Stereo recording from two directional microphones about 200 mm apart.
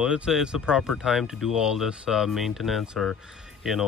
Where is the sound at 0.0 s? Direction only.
5° right (ahead or behind).